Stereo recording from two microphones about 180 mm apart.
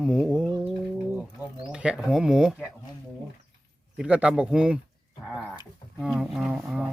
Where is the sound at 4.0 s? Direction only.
5° right (ahead or behind).